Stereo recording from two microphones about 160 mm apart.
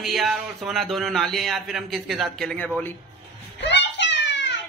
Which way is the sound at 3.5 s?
90° left.